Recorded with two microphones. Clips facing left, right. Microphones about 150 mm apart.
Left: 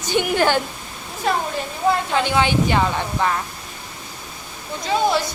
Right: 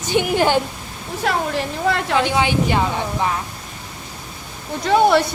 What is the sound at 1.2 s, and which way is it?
Speech, 85° right.